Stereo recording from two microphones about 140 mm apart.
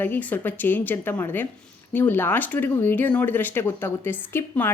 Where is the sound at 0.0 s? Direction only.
10° left (ahead or behind).